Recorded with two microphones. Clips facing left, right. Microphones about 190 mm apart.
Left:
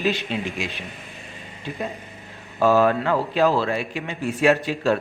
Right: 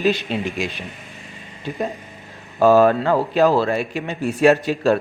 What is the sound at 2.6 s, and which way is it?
A man's voice, 35° right (ahead or behind).